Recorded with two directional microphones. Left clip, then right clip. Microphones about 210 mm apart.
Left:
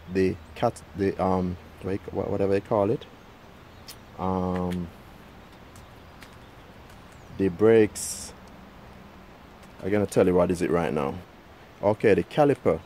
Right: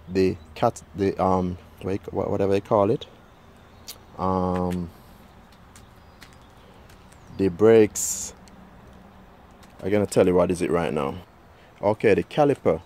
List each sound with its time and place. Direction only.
0.1 s speech: 20° right (ahead or behind)
3.8 s a sound: 25° right (ahead or behind)
7.3 s speech: 20° right (ahead or behind)
9.8 s speech: 20° right (ahead or behind)